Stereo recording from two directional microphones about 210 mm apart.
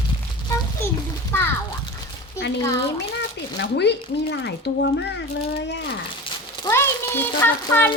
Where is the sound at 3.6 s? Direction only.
55° left (ahead or behind).